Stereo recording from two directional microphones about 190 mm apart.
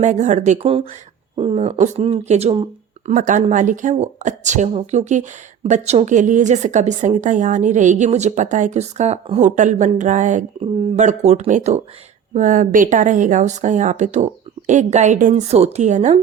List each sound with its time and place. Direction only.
0.0 s a woman's voice: 40° right (ahead or behind)